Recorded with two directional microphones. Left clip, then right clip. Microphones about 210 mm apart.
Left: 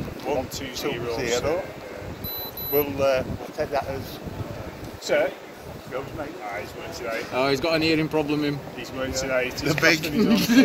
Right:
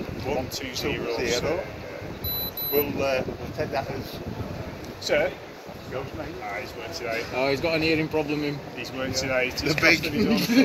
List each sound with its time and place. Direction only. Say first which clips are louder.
0.3 s speech: left 2 dB; 60° left (ahead or behind)
2.7 s speech: left 3 dB; 60° left (ahead or behind)
7.3 s speech: left 3 dB; 50° left (ahead or behind)
8.9 s speech: left 1 dB; 10° left (ahead or behind)
9.7 s speech: even; 70° left (ahead or behind)